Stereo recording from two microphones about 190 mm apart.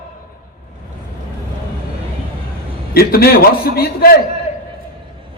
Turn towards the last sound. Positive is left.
turn(degrees=55)  # may be behind; listen again after turning